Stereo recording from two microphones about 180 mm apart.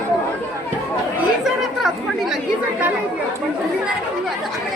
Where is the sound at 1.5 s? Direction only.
Centre (ahead or behind).